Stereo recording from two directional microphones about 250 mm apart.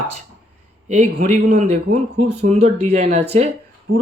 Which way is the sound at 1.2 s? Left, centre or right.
Right.